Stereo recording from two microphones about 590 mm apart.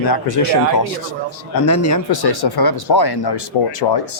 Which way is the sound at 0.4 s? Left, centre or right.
Left.